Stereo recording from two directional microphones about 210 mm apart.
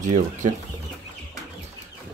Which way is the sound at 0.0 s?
35° right (ahead or behind).